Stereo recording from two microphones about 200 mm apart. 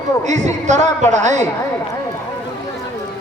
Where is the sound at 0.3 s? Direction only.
35° right (ahead or behind).